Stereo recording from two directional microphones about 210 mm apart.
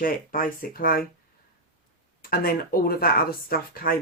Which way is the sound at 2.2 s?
45° left (ahead or behind).